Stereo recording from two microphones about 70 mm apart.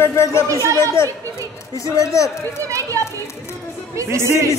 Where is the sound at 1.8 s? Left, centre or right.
Left.